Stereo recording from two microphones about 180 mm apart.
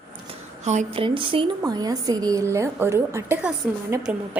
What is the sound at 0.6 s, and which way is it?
Speech, 40° right (ahead or behind).